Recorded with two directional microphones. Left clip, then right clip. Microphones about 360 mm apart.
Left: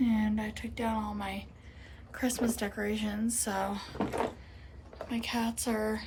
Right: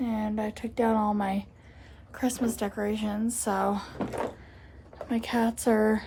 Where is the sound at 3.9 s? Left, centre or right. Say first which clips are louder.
Even; centre.